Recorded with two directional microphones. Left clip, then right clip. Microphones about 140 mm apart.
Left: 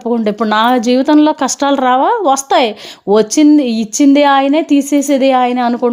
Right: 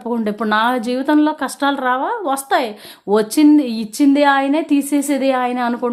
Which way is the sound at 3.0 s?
30° left (ahead or behind).